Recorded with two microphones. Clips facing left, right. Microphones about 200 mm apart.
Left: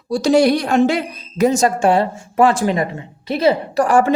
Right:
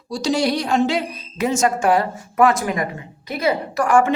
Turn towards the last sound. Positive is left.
turn(degrees=35)  # may be behind; listen again after turning